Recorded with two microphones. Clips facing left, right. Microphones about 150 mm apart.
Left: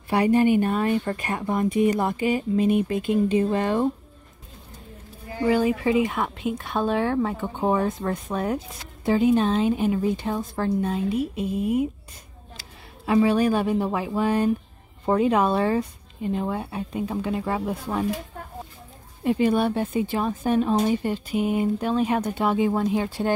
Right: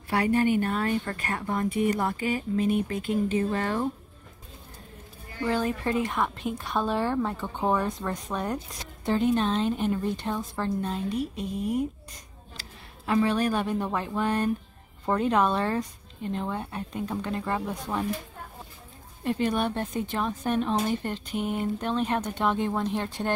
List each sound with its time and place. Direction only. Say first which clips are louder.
0.1 s speech: left 5 dB; 20° left (ahead or behind)
5.4 s a woman's voice: left 6 dB; 10° left (ahead or behind)
13.0 s a woman's voice: left 5 dB; 15° left (ahead or behind)
19.2 s a woman's voice: left 5 dB; 10° left (ahead or behind)